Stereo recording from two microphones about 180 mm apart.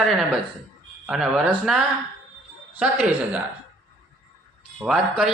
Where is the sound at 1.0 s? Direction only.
Centre (ahead or behind).